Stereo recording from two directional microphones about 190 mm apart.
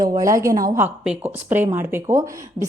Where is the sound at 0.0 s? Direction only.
20° right (ahead or behind).